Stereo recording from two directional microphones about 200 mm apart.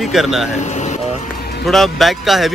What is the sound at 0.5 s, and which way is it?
Air conditioning, 35° left (ahead or behind).